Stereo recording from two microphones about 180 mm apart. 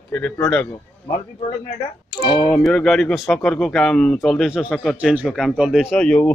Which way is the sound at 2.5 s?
5° left (ahead or behind).